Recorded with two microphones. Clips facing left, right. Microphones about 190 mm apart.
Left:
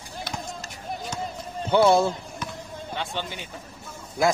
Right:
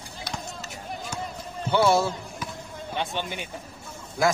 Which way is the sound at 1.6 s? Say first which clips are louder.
Left 3 dB; 20° left (ahead or behind).